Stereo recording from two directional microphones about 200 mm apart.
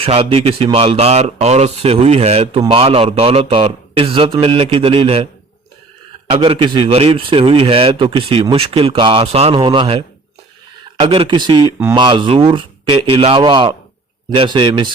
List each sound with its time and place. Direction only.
0.0 s a man's voice: 30° right (ahead or behind)
6.3 s a man's voice: 25° right (ahead or behind)
11.0 s a man's voice: 25° right (ahead or behind)